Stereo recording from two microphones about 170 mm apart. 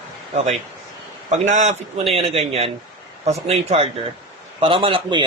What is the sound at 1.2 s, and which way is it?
A man's voice, 45° right (ahead or behind).